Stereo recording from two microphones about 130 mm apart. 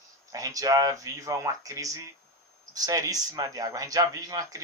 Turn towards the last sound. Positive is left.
turn(degrees=-25)  # may be behind; listen again after turning